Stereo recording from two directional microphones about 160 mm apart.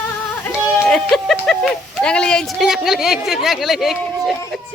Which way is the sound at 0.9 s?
Centre (ahead or behind).